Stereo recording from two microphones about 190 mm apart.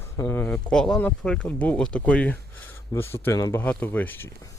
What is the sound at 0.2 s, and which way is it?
Speech, 10° left (ahead or behind).